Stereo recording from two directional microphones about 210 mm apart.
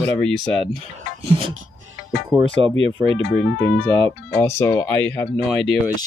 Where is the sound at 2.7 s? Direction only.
65° left (ahead or behind).